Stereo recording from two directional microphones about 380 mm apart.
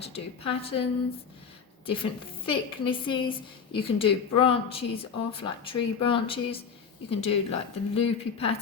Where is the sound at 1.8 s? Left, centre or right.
Centre.